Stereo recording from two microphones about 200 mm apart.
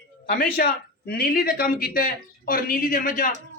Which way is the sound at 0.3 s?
50° left (ahead or behind).